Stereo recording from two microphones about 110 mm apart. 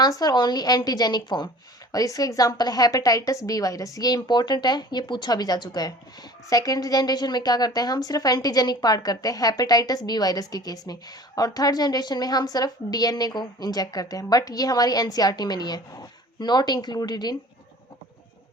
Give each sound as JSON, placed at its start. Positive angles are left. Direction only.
{"t": 0.0, "sound": "a woman's voice", "side_deg": 35}